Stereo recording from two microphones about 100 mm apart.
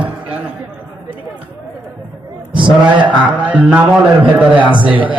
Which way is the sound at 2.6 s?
55° right (ahead or behind).